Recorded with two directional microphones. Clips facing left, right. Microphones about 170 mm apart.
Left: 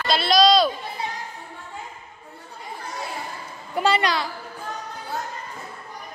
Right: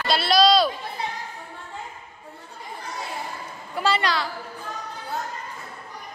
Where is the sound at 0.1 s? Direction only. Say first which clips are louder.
Left 1 dB; 5° right (ahead or behind).